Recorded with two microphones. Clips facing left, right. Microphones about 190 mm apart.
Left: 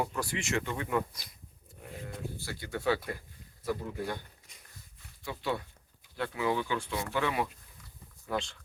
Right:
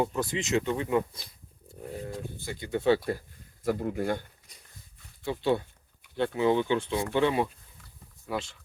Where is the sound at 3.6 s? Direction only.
50° right (ahead or behind).